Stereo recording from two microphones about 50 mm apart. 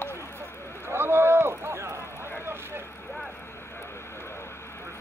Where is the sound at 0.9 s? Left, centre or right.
Right.